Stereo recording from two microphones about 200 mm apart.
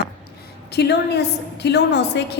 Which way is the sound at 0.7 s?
55° left (ahead or behind).